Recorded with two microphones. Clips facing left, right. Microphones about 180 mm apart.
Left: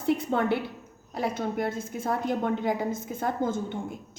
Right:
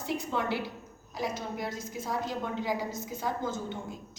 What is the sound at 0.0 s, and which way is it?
A woman's voice, 60° left (ahead or behind).